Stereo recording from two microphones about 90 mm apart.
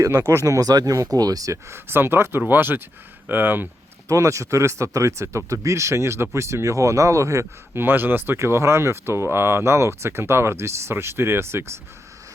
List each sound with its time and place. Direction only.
0.0 s speech: 30° right (ahead or behind)
0.4 s speech: 45° right (ahead or behind)
1.7 s speech: 25° right (ahead or behind)
4.1 s speech: 35° right (ahead or behind)